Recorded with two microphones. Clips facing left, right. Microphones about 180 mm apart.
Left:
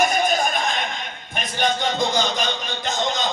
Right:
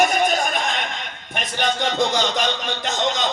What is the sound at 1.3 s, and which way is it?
A man's voice, 75° right (ahead or behind).